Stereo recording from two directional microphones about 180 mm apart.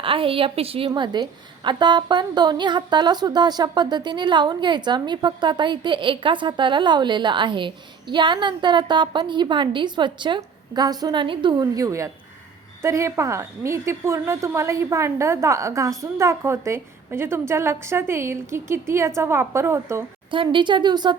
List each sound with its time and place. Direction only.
0.0 s a woman's voice: 30° right (ahead or behind); by 20.1 s 15° right (ahead or behind)
20.3 s a woman's voice: 30° right (ahead or behind)